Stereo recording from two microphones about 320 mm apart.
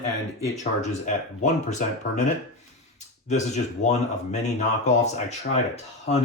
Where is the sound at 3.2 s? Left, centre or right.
Left.